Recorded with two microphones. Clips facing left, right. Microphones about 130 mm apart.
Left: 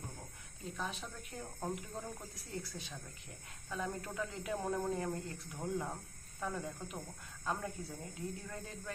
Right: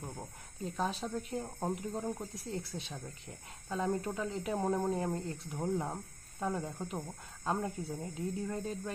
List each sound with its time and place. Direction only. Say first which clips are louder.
0.6 s speech: right 7 dB; 35° right (ahead or behind)